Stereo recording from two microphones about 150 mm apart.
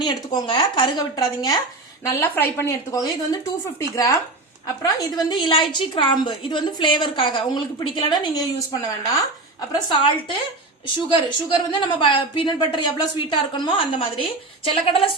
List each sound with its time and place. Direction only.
0.0 s speech: 25° left (ahead or behind)
2.0 s a woman's voice: 15° left (ahead or behind)
10.0 s a woman's voice: 35° left (ahead or behind)